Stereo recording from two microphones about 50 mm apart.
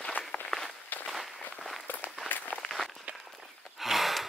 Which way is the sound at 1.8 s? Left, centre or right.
Left.